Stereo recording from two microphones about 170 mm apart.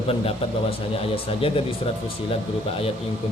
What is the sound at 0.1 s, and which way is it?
Speech, 35° left (ahead or behind).